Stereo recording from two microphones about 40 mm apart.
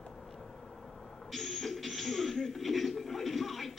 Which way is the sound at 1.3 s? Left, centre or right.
Centre.